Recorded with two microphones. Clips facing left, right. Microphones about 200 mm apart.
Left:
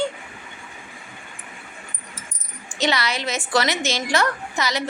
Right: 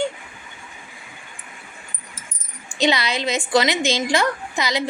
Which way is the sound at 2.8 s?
15° right (ahead or behind).